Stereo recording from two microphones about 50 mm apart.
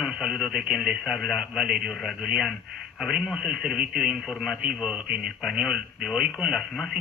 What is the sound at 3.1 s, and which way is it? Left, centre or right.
Speech, centre.